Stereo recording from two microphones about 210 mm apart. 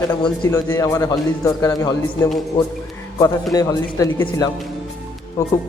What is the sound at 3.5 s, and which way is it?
Speech, 15° left (ahead or behind).